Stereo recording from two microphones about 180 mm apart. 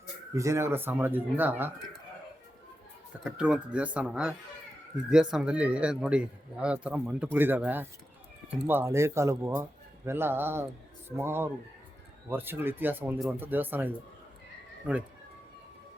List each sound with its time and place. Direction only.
0.3 s speech: 15° right (ahead or behind)
3.2 s speech: 5° right (ahead or behind)